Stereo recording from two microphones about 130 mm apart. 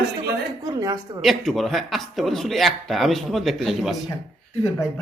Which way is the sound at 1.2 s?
Centre (ahead or behind).